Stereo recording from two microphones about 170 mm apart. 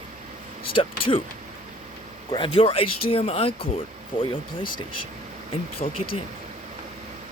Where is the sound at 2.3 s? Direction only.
30° left (ahead or behind).